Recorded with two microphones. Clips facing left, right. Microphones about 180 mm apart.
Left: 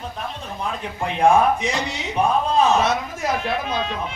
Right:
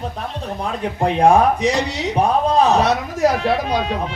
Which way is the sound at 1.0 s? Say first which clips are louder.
Right 3 dB; 35° right (ahead or behind).